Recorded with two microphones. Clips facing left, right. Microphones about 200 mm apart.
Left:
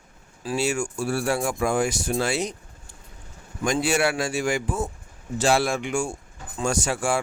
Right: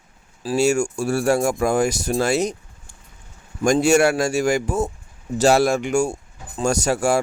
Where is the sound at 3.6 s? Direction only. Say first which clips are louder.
Right 7 dB; 45° right (ahead or behind).